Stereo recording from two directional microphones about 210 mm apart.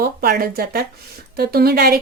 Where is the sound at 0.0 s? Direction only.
45° right (ahead or behind).